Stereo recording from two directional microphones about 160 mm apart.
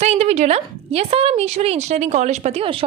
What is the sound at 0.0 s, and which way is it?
A woman's voice, 40° right (ahead or behind).